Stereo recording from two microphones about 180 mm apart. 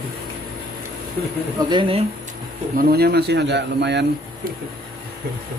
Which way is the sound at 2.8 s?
55° right (ahead or behind).